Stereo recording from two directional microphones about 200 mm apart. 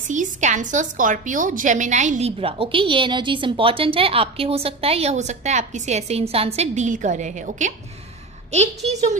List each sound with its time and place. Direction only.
0.1 s a woman's voice: 40° right (ahead or behind)